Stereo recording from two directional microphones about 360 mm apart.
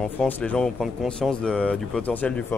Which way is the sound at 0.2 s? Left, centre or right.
Centre.